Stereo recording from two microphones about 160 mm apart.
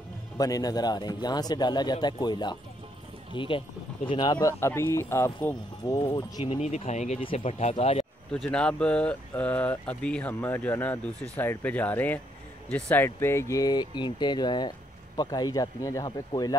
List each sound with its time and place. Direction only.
0.4 s speech: 25° left (ahead or behind)
5.9 s speech: 25° left (ahead or behind)
6.5 s speech: 40° left (ahead or behind)
8.3 s speech: 5° left (ahead or behind); by 16.5 s 25° left (ahead or behind)